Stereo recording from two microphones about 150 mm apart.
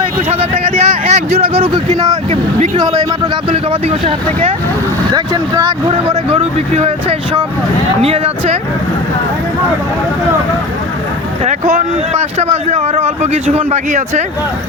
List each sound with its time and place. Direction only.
0.0 s a sound: 45° right (ahead or behind)
2.7 s speech: 25° right (ahead or behind)
3.5 s speech: 40° right (ahead or behind)
5.1 s speech: 20° right (ahead or behind)
6.1 s speech: 45° right (ahead or behind)
11.4 s speech: 50° right (ahead or behind)